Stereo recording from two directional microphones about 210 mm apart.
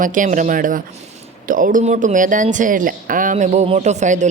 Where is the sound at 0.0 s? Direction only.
40° right (ahead or behind).